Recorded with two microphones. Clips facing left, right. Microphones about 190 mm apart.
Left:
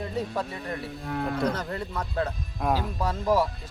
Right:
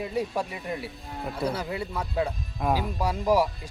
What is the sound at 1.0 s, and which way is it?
Speech, 65° left (ahead or behind).